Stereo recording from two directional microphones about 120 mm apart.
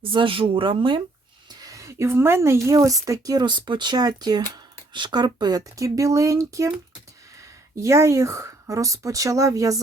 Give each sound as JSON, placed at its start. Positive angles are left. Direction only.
{"t": 0.0, "sound": "speech", "side_deg": -45}
{"t": 1.6, "sound": "a woman's voice", "side_deg": -25}
{"t": 7.8, "sound": "speech", "side_deg": -25}